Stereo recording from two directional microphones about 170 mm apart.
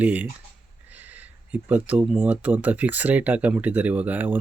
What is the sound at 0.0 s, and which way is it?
Speech, 10° right (ahead or behind).